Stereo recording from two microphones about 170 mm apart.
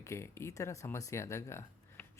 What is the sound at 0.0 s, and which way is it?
Speech, 15° left (ahead or behind).